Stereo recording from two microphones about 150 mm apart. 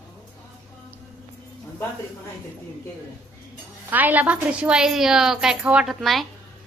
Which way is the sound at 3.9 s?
10° right (ahead or behind).